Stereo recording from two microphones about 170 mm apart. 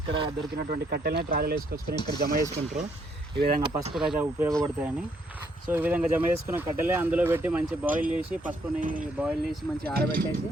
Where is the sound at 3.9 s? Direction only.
5° right (ahead or behind).